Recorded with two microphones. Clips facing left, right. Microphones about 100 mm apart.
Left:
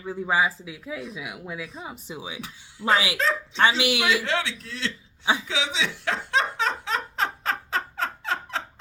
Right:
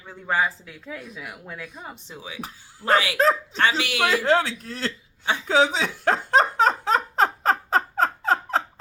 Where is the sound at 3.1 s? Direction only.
40° right (ahead or behind).